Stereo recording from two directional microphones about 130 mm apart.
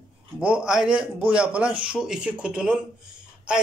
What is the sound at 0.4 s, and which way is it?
Speech, 10° right (ahead or behind).